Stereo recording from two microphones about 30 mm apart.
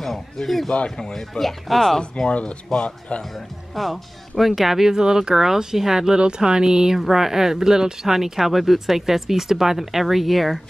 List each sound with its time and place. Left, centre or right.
0.0 s speech: centre
0.9 s speech: centre
1.4 s speech: centre
2.0 s speech: left
3.3 s speech: centre
6.1 s speech: right; by 10.6 s centre